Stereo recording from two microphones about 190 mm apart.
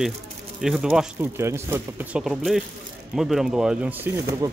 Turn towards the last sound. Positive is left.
turn(degrees=-10)  # may be behind; listen again after turning